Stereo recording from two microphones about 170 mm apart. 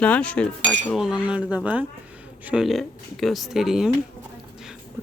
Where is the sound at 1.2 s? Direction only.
10° right (ahead or behind).